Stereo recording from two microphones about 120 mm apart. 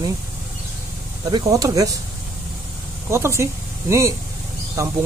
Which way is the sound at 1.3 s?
30° right (ahead or behind).